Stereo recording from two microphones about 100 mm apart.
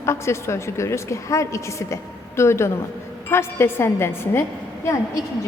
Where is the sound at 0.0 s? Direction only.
25° left (ahead or behind).